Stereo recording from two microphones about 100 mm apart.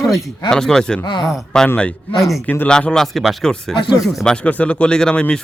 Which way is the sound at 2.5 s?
10° left (ahead or behind).